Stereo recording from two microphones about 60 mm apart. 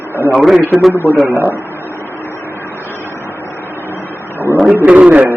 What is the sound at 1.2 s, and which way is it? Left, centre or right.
Speech, right.